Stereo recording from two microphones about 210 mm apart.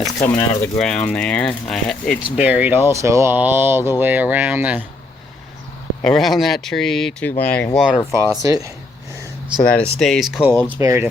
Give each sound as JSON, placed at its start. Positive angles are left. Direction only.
{"t": 0.0, "sound": "speech", "side_deg": 0}
{"t": 6.0, "sound": "speech", "side_deg": 0}
{"t": 8.4, "sound": "speech", "side_deg": -15}
{"t": 9.6, "sound": "speech", "side_deg": 5}
{"t": 10.8, "sound": "speech", "side_deg": -15}